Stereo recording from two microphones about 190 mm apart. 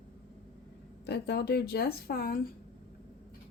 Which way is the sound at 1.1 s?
60° left (ahead or behind).